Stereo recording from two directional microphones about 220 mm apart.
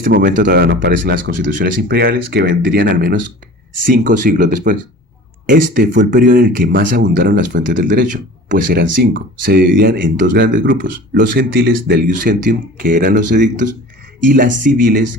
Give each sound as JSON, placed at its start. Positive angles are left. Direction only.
{"t": 0.1, "sound": "speech", "side_deg": -50}
{"t": 0.7, "sound": "speech", "side_deg": -55}